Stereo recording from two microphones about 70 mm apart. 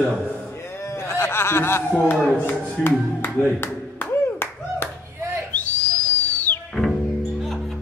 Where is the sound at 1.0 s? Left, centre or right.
Left.